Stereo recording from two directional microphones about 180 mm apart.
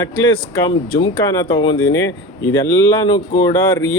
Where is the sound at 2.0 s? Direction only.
80° left.